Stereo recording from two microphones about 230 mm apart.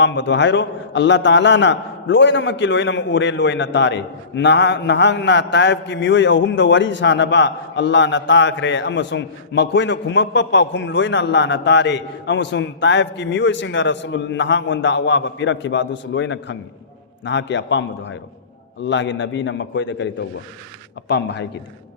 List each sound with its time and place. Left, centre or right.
0.0 s a man's voice: left
21.1 s a man's voice: left